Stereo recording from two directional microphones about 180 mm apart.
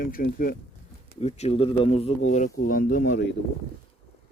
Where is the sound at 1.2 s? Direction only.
35° left (ahead or behind); by 3.2 s 50° left (ahead or behind).